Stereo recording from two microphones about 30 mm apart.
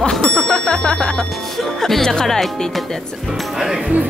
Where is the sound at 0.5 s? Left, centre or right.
Centre.